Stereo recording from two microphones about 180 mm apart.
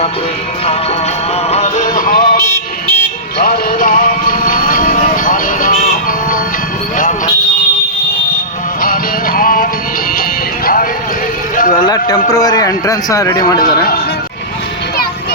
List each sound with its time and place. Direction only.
1.5 s music: 35° left (ahead or behind)
2.5 s a sound: 10° left (ahead or behind)
3.3 s music: 50° left (ahead or behind)
8.8 s music: 55° left (ahead or behind)
11.8 s a sound: 20° left (ahead or behind)
12.3 s a man's voice: 20° left (ahead or behind)
13.6 s a man's voice: 55° left (ahead or behind)